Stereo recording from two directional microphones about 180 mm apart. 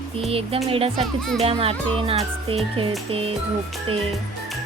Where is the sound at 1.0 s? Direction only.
Centre (ahead or behind).